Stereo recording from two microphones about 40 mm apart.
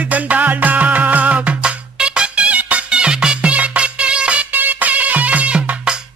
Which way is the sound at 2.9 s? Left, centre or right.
Right.